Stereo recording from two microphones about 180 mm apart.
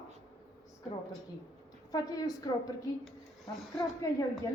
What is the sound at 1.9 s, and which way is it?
Speech, 20° left (ahead or behind).